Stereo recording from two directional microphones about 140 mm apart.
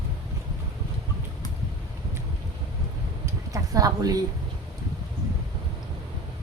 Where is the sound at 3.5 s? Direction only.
25° right (ahead or behind).